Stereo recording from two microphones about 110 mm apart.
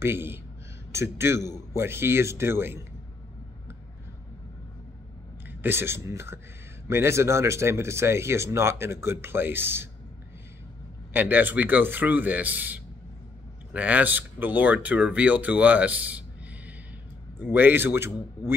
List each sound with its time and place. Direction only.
0.0 s speech: 20° right (ahead or behind)
5.6 s speech: 20° right (ahead or behind)
11.1 s speech: 15° right (ahead or behind)